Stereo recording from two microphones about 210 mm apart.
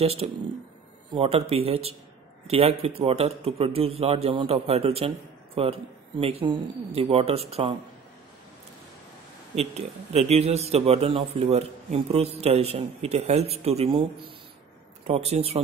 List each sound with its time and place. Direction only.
0.0 s a man's voice: 30° right (ahead or behind)
9.6 s a man's voice: 30° right (ahead or behind)
15.0 s a man's voice: 30° right (ahead or behind)